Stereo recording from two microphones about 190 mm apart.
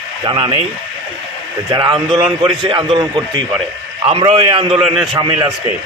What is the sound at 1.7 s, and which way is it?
A man's voice, 25° right (ahead or behind).